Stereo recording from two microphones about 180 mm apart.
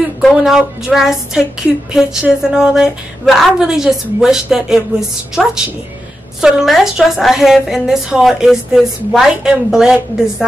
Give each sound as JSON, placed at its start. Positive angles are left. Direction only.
{"t": 0.2, "sound": "a woman's voice", "side_deg": -5}